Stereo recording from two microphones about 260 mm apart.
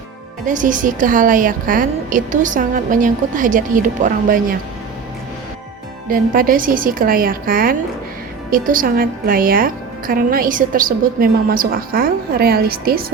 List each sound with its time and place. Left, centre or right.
0.4 s a woman's voice: right
6.1 s a woman's voice: right